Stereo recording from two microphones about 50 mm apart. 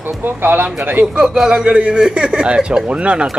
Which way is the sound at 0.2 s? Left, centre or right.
Right.